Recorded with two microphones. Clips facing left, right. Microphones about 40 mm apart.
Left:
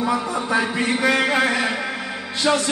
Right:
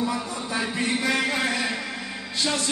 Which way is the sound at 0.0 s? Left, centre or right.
Left.